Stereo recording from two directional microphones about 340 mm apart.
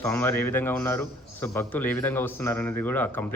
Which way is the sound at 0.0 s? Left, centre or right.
Centre.